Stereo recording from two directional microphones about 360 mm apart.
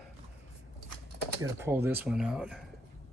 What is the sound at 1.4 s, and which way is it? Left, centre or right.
Speech, centre.